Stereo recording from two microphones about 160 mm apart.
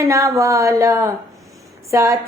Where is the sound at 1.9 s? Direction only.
15° right (ahead or behind).